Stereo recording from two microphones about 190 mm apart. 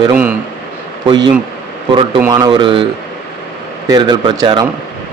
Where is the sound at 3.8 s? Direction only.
20° right (ahead or behind).